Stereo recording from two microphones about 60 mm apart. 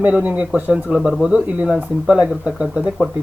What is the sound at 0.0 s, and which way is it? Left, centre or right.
Speech, right.